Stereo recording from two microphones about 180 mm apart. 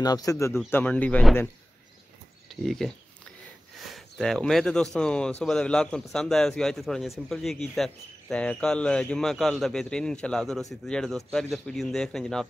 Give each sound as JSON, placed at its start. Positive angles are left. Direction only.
{"t": 0.0, "sound": "a man's voice", "side_deg": 20}
{"t": 2.6, "sound": "speech", "side_deg": 0}
{"t": 3.9, "sound": "speech", "side_deg": 5}